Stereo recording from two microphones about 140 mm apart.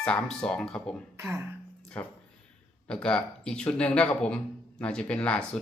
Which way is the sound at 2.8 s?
5° left (ahead or behind).